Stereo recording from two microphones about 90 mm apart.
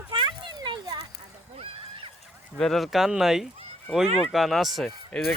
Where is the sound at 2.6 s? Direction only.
5° left (ahead or behind).